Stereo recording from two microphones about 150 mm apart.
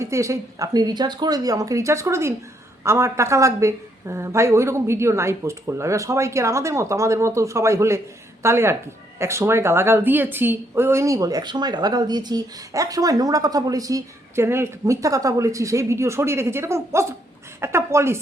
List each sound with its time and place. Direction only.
0.0 s a woman's voice: 20° right (ahead or behind)